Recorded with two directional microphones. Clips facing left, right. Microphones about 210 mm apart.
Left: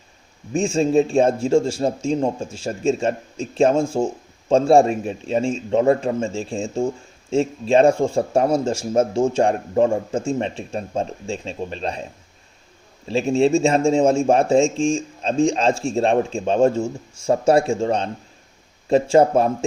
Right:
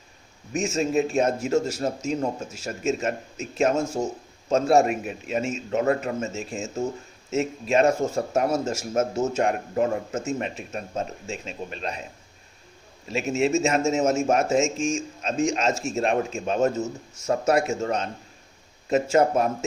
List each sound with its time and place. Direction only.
0.5 s speech: 30° left (ahead or behind)
13.1 s speech: 30° left (ahead or behind)